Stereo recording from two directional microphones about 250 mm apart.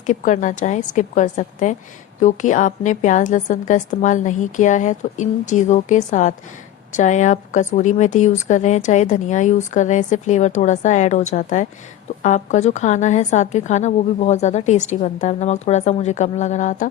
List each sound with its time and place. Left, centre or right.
0.0 s a woman's voice: left